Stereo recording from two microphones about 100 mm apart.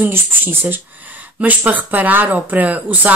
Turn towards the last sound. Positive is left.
turn(degrees=-15)  # may be behind; listen again after turning